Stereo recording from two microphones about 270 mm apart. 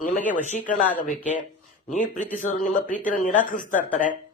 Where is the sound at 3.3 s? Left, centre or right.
Left.